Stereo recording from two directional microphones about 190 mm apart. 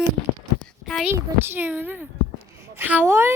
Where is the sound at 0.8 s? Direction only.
Centre (ahead or behind).